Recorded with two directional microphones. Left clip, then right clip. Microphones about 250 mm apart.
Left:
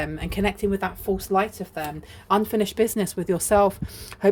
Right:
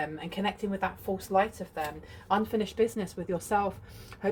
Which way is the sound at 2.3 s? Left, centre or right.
Left.